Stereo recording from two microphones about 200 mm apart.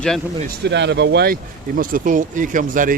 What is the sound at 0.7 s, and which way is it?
Speech, 60° right (ahead or behind).